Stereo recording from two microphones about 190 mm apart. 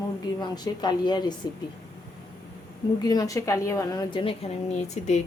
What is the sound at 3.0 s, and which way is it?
A woman's voice, 20° left (ahead or behind).